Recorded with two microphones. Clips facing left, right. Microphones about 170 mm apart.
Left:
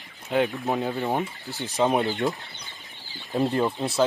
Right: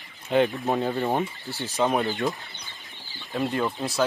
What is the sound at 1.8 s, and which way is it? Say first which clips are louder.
Speech: left 1 dB; 20° left (ahead or behind).